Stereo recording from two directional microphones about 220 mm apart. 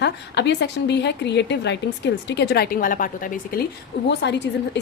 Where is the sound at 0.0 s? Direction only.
50° left (ahead or behind).